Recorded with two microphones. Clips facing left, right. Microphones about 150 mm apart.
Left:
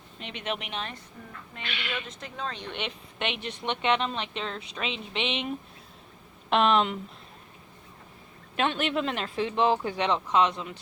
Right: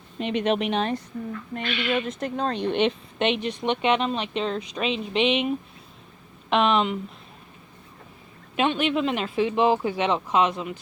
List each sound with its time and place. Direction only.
0.3 s speech: 35° right (ahead or behind)
1.5 s speech: 50° right (ahead or behind)
2.6 s a woman's voice: 30° right (ahead or behind); by 5.5 s 10° right (ahead or behind)
6.5 s speech: centre (ahead or behind)
8.5 s a woman's voice: 5° right (ahead or behind)